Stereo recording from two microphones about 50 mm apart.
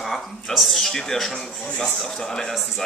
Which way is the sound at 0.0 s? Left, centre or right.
Centre.